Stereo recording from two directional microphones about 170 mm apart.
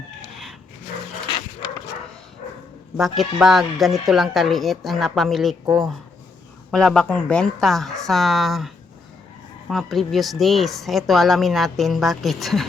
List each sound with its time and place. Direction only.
3.0 s speech: centre (ahead or behind)
6.7 s speech: centre (ahead or behind)